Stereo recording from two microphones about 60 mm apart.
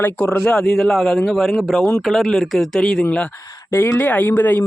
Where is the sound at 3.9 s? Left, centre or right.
Left.